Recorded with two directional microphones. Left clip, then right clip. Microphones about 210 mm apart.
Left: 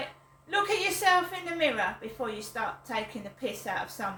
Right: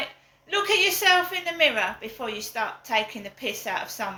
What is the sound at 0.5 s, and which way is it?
A woman's voice, 15° left (ahead or behind).